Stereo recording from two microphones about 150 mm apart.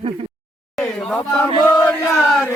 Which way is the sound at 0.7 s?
5° left (ahead or behind).